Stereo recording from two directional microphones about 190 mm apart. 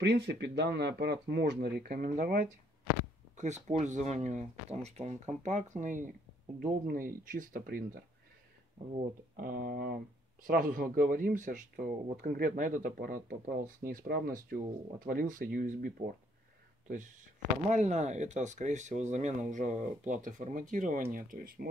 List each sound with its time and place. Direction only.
0.0 s speech: 60° right (ahead or behind)
3.3 s speech: 40° right (ahead or behind)
17.6 s speech: 35° right (ahead or behind)